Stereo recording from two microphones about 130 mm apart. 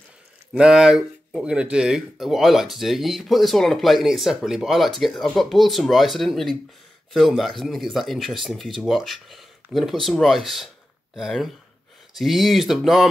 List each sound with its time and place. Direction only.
0.5 s speech: 5° right (ahead or behind)